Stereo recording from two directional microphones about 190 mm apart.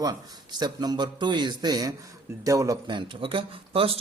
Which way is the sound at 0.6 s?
20° right (ahead or behind).